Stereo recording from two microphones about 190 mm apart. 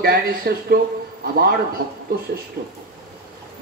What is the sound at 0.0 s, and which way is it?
A man's voice, 55° right (ahead or behind).